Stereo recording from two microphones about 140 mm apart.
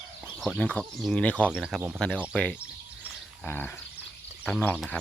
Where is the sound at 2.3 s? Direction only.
10° left (ahead or behind).